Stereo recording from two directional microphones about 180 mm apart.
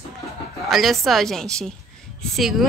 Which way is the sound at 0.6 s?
Centre (ahead or behind).